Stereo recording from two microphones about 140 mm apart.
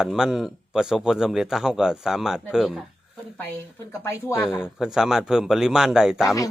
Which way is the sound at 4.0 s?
20° left (ahead or behind).